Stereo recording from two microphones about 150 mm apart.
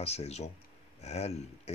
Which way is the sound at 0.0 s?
45° left (ahead or behind).